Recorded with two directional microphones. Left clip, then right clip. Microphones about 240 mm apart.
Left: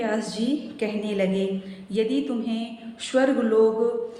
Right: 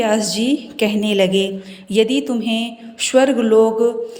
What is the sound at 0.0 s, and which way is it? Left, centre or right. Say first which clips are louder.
A woman's voice: right 9 dB; right.